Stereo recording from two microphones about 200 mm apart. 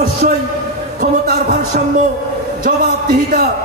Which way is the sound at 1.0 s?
45° right (ahead or behind).